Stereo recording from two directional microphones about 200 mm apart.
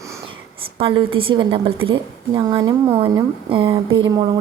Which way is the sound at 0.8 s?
25° right (ahead or behind).